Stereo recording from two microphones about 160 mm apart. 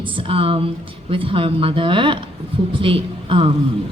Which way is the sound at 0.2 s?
35° right (ahead or behind).